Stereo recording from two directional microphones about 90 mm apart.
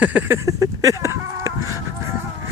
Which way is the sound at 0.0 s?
20° right (ahead or behind).